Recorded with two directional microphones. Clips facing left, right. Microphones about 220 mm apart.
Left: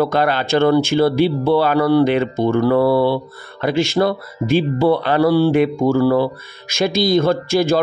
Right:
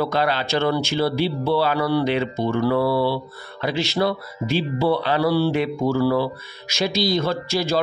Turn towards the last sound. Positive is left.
turn(degrees=50)  # may be behind; listen again after turning